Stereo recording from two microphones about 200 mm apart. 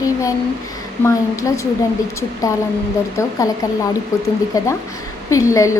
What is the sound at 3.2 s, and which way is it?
Speech, 15° left (ahead or behind).